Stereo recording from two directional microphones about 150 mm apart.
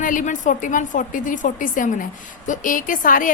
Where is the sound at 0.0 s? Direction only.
60° left (ahead or behind).